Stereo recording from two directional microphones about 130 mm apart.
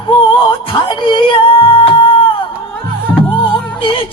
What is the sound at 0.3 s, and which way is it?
Music, 40° left (ahead or behind).